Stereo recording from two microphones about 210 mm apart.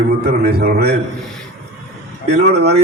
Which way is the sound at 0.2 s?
50° right (ahead or behind).